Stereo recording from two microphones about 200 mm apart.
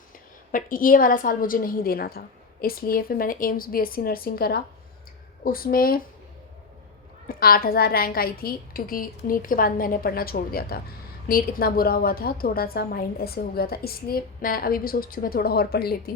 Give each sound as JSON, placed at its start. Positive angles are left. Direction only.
{"t": 0.5, "sound": "a woman's voice", "side_deg": 45}
{"t": 7.3, "sound": "a woman's voice", "side_deg": 50}